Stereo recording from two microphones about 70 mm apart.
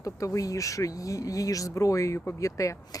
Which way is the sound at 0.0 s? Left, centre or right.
Left.